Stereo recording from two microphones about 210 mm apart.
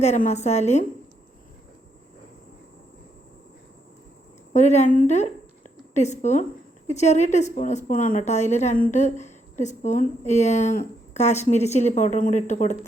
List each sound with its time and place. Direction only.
0.0 s a woman's voice: 30° left (ahead or behind)
4.5 s a woman's voice: 35° left (ahead or behind)